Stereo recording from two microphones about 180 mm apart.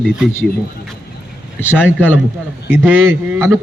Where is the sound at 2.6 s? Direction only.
10° right (ahead or behind).